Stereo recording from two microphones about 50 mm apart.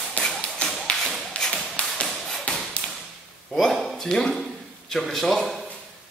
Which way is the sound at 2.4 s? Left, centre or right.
Centre.